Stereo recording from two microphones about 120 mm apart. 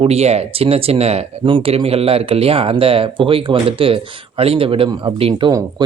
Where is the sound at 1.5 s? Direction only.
50° right (ahead or behind).